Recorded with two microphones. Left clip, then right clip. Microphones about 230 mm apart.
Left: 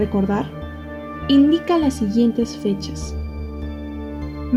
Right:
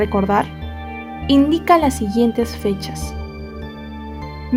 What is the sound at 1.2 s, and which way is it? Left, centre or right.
A woman's voice, right.